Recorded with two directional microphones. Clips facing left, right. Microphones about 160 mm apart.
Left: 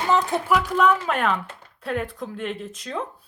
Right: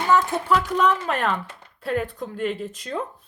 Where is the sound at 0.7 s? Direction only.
Centre (ahead or behind).